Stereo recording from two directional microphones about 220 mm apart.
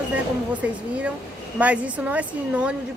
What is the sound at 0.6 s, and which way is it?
A woman's voice, 5° right (ahead or behind).